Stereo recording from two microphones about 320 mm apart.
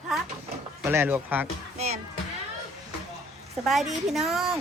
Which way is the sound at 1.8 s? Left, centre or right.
Centre.